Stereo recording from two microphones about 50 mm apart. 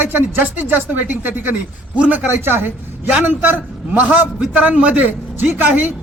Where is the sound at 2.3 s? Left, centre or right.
Right.